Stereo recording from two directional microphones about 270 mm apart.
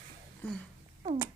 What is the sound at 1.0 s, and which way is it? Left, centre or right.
Cat, centre.